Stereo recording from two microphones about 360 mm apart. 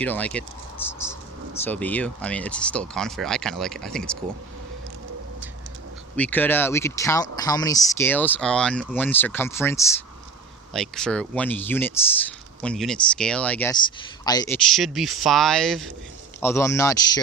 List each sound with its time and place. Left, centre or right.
0.0 s speech: centre
6.1 s speech: centre